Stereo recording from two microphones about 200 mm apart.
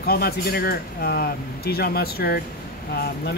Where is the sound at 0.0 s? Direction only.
50° left (ahead or behind).